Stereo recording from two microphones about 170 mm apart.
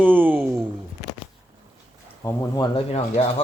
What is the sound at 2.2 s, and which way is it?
Speech, 15° left (ahead or behind).